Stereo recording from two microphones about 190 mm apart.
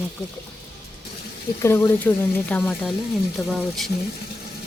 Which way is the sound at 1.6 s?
15° left (ahead or behind).